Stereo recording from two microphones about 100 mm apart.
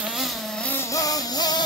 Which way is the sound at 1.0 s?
35° left (ahead or behind).